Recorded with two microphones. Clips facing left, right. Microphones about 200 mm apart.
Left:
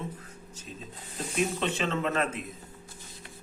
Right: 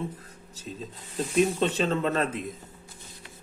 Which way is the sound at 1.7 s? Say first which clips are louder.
Right 3 dB; 35° right (ahead or behind).